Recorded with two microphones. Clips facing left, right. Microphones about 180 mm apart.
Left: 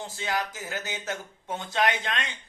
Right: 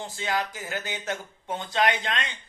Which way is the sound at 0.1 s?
20° right (ahead or behind).